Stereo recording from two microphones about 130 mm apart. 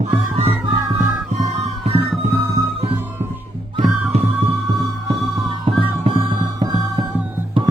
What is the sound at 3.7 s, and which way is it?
Music, 55° right (ahead or behind).